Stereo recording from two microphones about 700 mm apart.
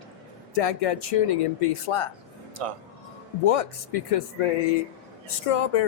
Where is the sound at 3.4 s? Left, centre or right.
Left.